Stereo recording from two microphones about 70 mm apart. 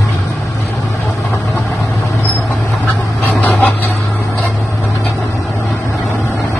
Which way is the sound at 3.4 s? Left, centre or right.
Left.